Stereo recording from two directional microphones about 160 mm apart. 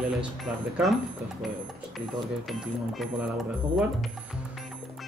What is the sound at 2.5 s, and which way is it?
Speech, centre (ahead or behind).